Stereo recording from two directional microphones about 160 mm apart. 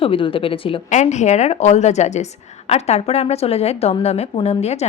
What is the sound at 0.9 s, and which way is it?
Speech, 45° left (ahead or behind).